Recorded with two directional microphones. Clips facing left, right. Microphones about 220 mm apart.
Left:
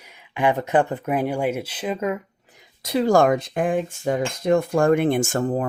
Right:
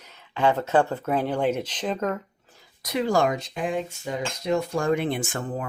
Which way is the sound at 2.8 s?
30° left (ahead or behind).